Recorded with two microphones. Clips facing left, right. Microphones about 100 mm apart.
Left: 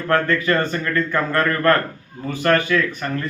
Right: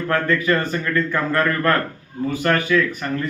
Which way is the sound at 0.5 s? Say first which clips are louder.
Left 1 dB; 25° left (ahead or behind).